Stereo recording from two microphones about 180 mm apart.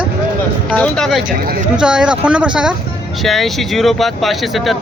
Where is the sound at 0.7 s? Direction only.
5° left (ahead or behind).